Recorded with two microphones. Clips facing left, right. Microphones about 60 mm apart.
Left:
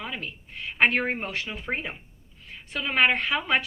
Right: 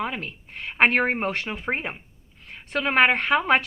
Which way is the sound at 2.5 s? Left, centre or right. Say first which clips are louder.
Right 5 dB; right.